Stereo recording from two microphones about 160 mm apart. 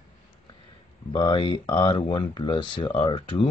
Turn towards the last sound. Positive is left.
turn(degrees=30)  # may be behind; listen again after turning